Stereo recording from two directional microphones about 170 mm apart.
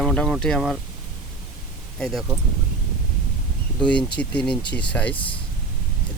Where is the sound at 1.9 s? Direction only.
5° left (ahead or behind).